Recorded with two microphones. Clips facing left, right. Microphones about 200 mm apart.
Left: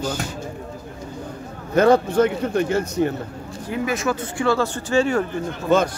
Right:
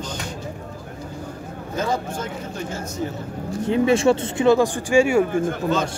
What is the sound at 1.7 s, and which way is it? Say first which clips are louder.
A man's voice: left 10 dB; 65° left (ahead or behind).